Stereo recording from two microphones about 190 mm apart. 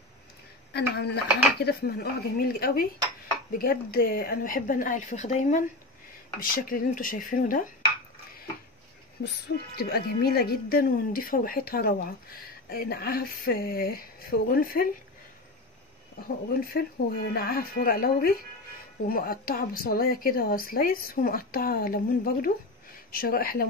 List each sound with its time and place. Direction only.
0.7 s a woman's voice: 60° left (ahead or behind)
9.2 s a woman's voice: 65° left (ahead or behind)
16.5 s a woman's voice: 55° left (ahead or behind)